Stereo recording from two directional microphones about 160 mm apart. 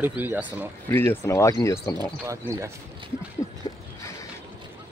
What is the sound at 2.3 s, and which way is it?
Speech, 15° right (ahead or behind).